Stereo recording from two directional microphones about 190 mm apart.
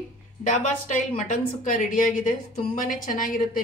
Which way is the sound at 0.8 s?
45° left (ahead or behind).